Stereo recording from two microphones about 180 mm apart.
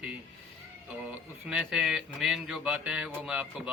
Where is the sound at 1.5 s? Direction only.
5° right (ahead or behind).